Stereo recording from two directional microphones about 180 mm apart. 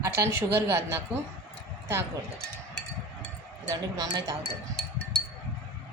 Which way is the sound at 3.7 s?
20° right (ahead or behind).